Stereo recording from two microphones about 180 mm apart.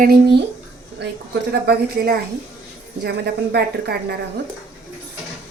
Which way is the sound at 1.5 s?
60° right (ahead or behind).